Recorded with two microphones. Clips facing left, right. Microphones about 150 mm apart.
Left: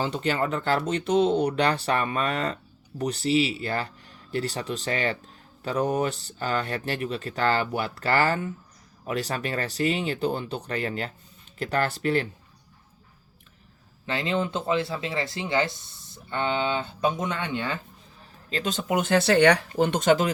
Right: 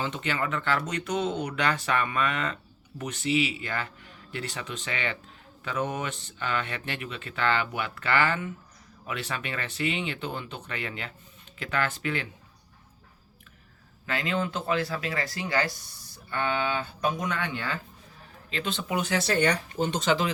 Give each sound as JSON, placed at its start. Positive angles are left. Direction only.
{"t": 0.0, "sound": "speech", "side_deg": 35}
{"t": 14.1, "sound": "speech", "side_deg": 25}
{"t": 18.5, "sound": "speech", "side_deg": 40}
{"t": 19.8, "sound": "speech", "side_deg": 50}